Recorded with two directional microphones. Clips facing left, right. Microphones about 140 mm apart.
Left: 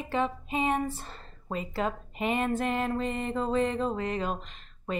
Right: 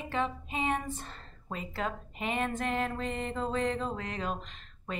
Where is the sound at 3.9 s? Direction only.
25° left (ahead or behind).